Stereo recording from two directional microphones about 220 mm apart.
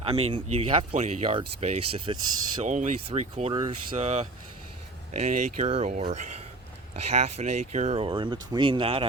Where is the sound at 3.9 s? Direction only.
30° right (ahead or behind).